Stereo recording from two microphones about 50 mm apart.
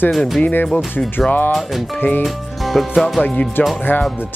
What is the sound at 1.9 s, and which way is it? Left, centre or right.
Speech, left.